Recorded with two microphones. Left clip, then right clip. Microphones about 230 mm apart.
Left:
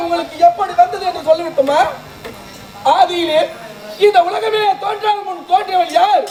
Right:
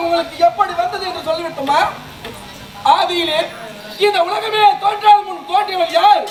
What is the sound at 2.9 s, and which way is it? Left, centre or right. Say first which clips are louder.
Speech: left 1 dB; centre.